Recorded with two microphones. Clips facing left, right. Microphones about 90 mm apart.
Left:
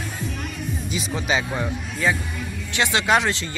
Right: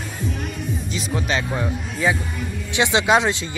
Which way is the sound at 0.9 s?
5° left (ahead or behind).